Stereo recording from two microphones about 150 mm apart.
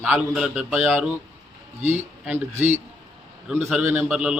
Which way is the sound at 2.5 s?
50° right (ahead or behind).